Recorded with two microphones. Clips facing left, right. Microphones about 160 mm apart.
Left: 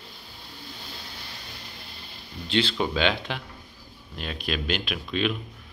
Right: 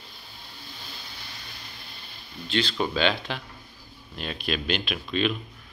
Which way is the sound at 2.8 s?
10° left (ahead or behind).